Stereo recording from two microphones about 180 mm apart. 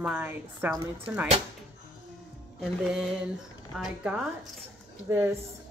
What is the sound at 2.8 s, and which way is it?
A woman's voice, 5° right (ahead or behind).